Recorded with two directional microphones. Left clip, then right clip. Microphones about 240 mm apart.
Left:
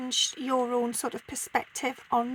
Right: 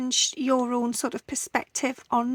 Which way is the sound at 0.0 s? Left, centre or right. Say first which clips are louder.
Right 3 dB; right.